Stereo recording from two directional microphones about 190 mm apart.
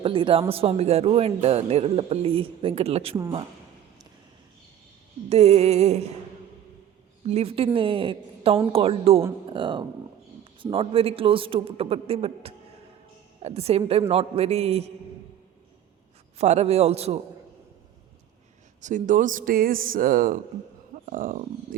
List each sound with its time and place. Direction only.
0.0 s speech: 30° right (ahead or behind)
5.3 s speech: 35° right (ahead or behind)
7.3 s a woman's voice: 30° right (ahead or behind)
16.4 s speech: 35° right (ahead or behind)
18.8 s speech: 40° right (ahead or behind)